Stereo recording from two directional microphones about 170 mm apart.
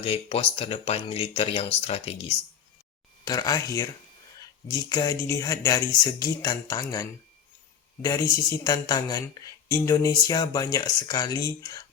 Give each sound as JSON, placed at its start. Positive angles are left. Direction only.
{"t": 0.0, "sound": "speech", "side_deg": 35}
{"t": 3.2, "sound": "speech", "side_deg": 20}
{"t": 8.0, "sound": "speech", "side_deg": 20}